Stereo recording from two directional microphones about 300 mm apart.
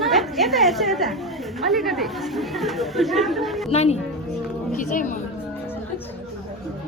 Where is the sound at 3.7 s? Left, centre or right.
Left.